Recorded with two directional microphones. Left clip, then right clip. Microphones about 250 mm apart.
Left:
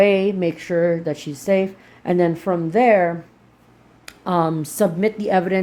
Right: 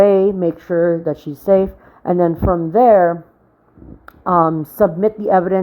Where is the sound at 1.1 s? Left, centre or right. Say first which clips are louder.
Right 4 dB; right.